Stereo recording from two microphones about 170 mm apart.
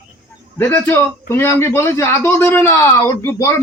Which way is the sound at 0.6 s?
15° left (ahead or behind).